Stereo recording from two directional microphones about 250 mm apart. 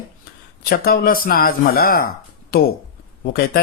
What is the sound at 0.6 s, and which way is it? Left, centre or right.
Speech, left.